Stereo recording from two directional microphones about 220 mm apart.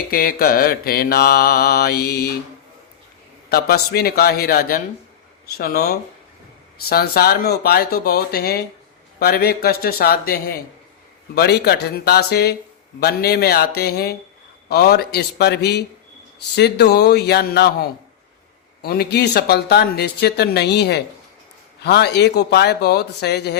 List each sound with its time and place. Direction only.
0.1 s speech: 45° left (ahead or behind)
3.5 s speech: 45° left (ahead or behind)